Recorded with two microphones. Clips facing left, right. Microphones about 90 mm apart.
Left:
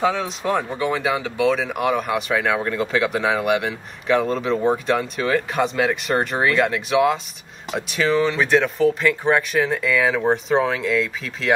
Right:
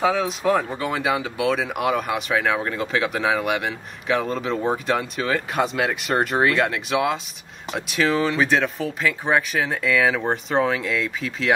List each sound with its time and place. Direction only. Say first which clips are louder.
0.0 s speech: right 1 dB; centre (ahead or behind)